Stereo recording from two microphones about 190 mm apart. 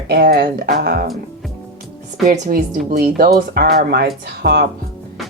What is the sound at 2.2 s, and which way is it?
Speech, 45° right (ahead or behind).